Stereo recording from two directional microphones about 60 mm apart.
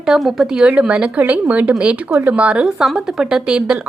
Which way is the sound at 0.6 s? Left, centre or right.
Right.